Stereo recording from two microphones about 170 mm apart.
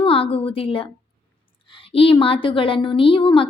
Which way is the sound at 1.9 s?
35° left (ahead or behind).